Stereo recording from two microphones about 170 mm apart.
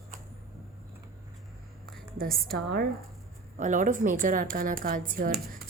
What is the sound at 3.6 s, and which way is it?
Speech, 50° right (ahead or behind).